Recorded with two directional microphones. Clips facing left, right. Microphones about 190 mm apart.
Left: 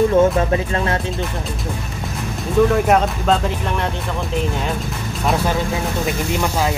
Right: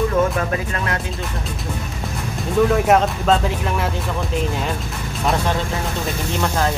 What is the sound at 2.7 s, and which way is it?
Speech, centre (ahead or behind).